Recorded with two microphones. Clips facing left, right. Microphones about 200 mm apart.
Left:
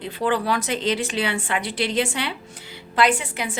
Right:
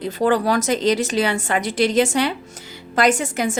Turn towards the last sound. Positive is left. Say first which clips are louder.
# right 5 dB
turn(degrees=-45)  # may be behind; listen again after turning